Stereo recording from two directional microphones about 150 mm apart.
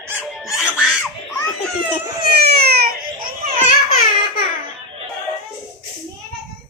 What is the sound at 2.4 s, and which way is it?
Baby cry, 90° right.